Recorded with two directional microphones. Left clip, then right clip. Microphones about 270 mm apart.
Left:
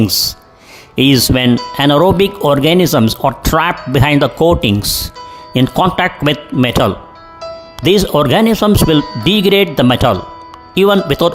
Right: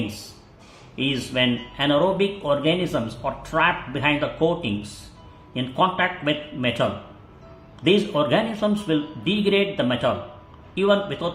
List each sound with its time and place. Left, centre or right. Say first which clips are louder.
0.9 s speech: left 12 dB; left